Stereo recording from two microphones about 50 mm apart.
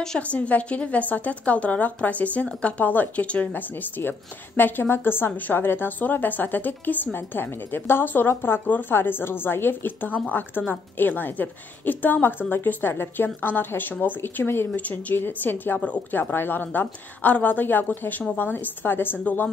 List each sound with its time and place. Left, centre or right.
0.3 s a woman's voice: left
2.9 s a woman's voice: left
4.6 s a woman's voice: left
14.8 s a woman's voice: left
15.1 s a woman's voice: left